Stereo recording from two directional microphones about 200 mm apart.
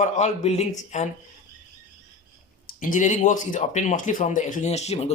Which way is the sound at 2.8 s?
40° left (ahead or behind).